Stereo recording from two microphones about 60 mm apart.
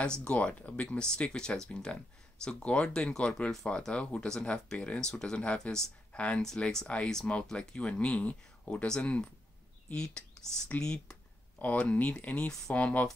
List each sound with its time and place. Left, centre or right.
0.0 s speech: centre
8.6 s speech: centre
11.5 s a sound: left
11.8 s speech: left